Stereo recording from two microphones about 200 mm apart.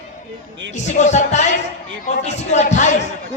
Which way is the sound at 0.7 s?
35° left (ahead or behind).